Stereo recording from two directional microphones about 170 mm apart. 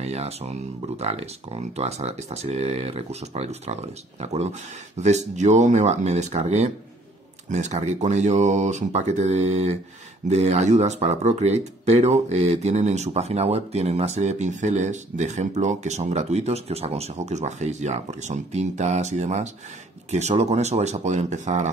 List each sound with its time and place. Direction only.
0.0 s speech: 40° right (ahead or behind)